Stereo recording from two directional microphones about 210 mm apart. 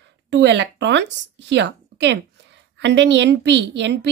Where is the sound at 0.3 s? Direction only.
55° right (ahead or behind).